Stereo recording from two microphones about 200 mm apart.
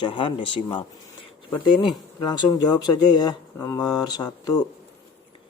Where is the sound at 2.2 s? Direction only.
20° left (ahead or behind).